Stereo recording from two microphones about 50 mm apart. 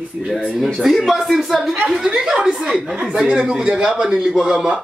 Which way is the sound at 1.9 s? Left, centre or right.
Centre.